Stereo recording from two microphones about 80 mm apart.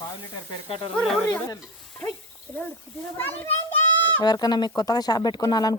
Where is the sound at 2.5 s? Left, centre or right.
Left.